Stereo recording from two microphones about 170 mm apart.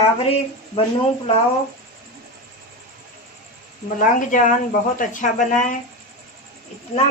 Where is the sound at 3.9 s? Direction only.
50° left (ahead or behind).